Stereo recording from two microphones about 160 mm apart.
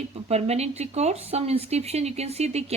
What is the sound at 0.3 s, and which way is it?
Speech, 40° right (ahead or behind).